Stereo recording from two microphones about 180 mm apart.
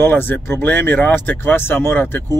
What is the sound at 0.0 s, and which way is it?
Speech, 10° left (ahead or behind).